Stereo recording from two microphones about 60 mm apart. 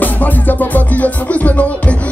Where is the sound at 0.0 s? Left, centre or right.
Left.